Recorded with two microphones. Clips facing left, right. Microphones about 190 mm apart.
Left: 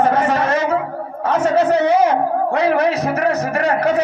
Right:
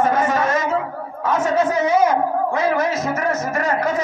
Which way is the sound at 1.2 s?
35° left (ahead or behind).